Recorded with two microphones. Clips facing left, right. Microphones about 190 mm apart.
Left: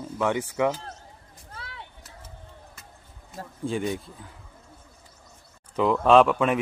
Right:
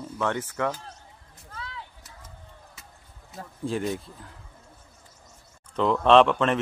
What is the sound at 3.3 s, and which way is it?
Speech, centre (ahead or behind).